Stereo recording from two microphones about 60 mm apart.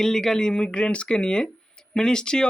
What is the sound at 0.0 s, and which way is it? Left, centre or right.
Speech, centre.